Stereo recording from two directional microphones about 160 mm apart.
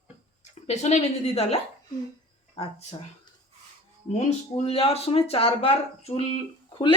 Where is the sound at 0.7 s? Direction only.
45° left (ahead or behind).